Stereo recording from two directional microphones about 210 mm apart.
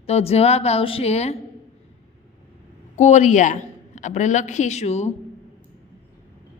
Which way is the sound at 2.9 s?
35° left (ahead or behind).